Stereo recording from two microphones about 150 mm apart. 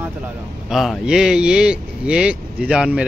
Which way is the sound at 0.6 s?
Centre (ahead or behind).